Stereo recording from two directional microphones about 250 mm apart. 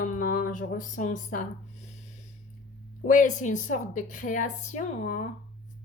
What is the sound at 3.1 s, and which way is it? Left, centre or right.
A woman's voice, left.